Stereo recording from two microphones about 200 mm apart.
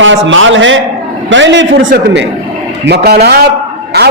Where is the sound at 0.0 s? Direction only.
70° right (ahead or behind).